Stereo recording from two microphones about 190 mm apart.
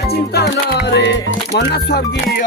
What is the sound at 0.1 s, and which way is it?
Music, 55° left (ahead or behind).